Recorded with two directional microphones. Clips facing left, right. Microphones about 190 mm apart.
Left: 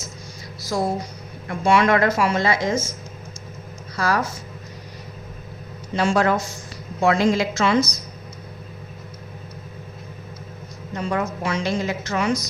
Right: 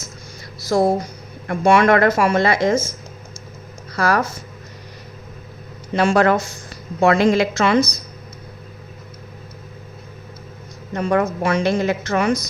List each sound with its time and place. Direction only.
0.7 s a woman's voice: 60° right (ahead or behind)
3.9 s speech: 55° right (ahead or behind)
5.9 s a woman's voice: 60° right (ahead or behind)
10.9 s a woman's voice: 55° right (ahead or behind)